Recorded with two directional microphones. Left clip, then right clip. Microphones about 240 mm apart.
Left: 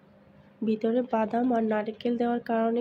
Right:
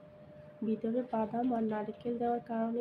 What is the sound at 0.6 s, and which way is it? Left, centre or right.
Speech, left.